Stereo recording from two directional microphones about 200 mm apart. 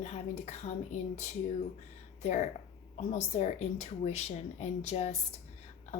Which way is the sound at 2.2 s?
35° left (ahead or behind).